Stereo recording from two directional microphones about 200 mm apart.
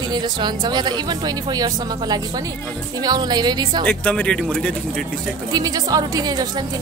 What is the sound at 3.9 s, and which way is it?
Speech, 5° left (ahead or behind).